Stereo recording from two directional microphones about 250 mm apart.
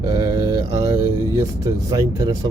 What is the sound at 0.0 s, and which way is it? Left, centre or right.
Mantra, centre.